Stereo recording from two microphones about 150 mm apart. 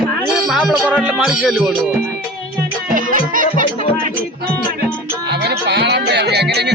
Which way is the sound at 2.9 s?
65° right (ahead or behind).